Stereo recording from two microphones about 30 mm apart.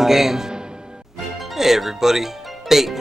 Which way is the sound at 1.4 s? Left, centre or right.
Centre.